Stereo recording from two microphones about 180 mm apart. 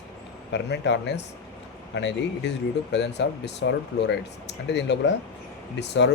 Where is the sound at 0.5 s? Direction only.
70° left (ahead or behind).